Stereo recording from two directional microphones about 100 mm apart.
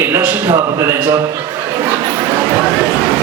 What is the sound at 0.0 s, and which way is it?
Speech, 20° right (ahead or behind).